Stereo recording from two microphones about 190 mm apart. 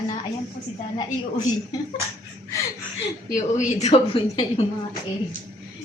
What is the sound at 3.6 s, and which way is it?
A woman's voice, 40° left (ahead or behind).